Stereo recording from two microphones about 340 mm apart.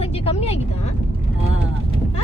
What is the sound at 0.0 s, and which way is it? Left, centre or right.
Vehicle, centre.